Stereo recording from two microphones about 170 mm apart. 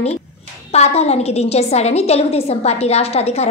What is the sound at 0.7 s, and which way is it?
A woman's voice, 40° left (ahead or behind).